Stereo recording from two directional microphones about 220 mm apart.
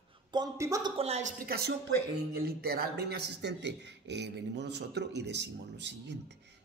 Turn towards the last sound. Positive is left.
turn(degrees=-50)  # may be behind; listen again after turning